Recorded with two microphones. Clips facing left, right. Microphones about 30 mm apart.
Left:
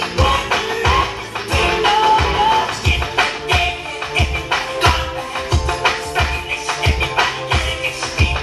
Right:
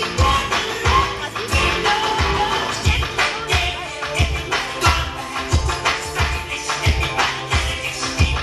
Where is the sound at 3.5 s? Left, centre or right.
Centre.